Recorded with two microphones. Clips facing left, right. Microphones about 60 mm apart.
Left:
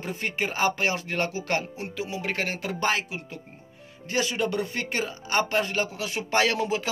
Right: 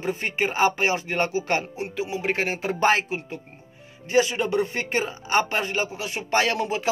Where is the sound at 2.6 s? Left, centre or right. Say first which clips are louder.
Right 7 dB; right.